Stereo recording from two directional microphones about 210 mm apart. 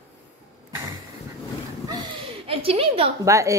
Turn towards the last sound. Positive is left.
turn(degrees=-15)  # may be behind; listen again after turning